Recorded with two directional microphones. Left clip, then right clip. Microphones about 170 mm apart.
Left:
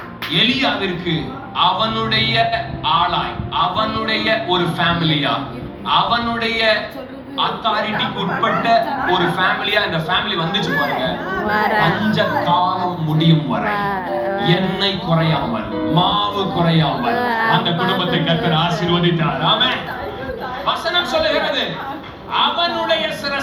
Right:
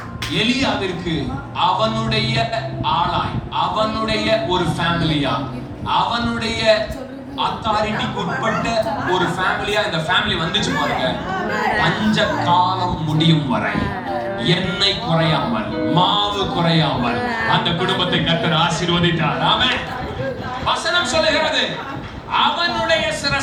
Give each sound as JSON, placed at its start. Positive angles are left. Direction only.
{"t": 0.3, "sound": "a man's voice", "side_deg": 0}
{"t": 12.1, "sound": "a man's voice", "side_deg": 0}
{"t": 17.2, "sound": "speech", "side_deg": 15}
{"t": 17.5, "sound": "a man's voice", "side_deg": 5}